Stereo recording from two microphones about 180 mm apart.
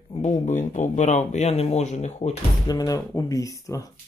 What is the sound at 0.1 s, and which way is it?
Speech, 40° left (ahead or behind).